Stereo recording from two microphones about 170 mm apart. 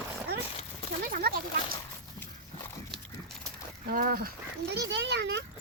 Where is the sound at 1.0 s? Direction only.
60° right (ahead or behind).